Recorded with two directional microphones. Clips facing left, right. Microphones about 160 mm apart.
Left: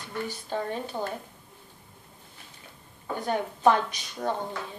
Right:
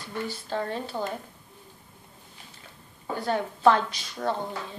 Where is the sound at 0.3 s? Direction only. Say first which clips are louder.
Right 1 dB; 15° left (ahead or behind).